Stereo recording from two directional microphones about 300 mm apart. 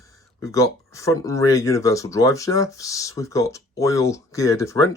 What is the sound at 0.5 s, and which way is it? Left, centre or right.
Speech, centre.